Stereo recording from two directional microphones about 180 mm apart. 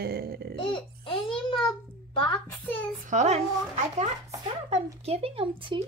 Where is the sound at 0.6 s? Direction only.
30° left (ahead or behind).